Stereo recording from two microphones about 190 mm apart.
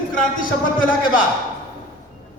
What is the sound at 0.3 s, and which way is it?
Speech, 45° left (ahead or behind).